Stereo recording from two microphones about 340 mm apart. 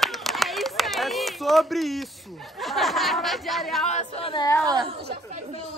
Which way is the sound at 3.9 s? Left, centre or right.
Centre.